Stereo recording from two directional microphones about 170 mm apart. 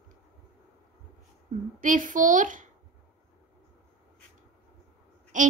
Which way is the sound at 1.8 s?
50° right (ahead or behind).